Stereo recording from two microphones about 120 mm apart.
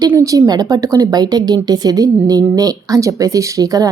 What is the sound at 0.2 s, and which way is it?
Speech, 30° right (ahead or behind).